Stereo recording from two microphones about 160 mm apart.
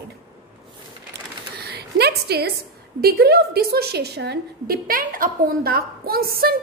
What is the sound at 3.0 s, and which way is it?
A woman's voice, 75° right (ahead or behind).